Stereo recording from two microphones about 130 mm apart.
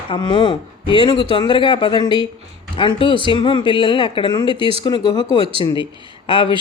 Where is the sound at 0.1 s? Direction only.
35° left (ahead or behind).